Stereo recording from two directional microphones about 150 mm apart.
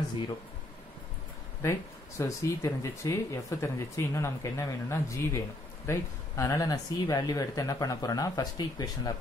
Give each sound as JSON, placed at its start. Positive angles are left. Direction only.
{"t": 1.6, "sound": "speech", "side_deg": 20}